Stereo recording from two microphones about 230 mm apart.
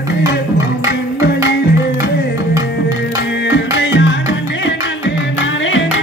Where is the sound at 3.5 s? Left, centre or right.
Left.